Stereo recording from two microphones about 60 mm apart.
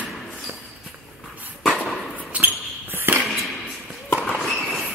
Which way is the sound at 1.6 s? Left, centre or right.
Centre.